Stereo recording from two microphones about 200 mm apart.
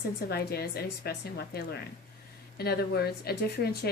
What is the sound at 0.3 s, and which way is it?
Speech, 50° left (ahead or behind).